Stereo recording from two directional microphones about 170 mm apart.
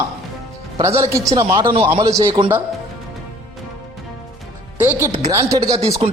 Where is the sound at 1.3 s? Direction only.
20° right (ahead or behind).